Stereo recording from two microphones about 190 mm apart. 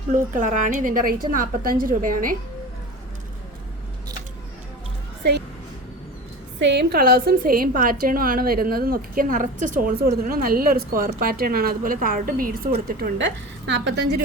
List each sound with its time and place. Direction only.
0.1 s a woman's voice: 40° right (ahead or behind)
6.6 s a woman's voice: 65° right (ahead or behind); by 12.5 s 45° right (ahead or behind)
12.9 s a woman's voice: 60° right (ahead or behind)